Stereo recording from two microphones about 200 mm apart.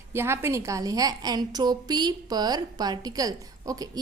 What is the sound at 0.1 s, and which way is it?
A woman's voice, 10° right (ahead or behind).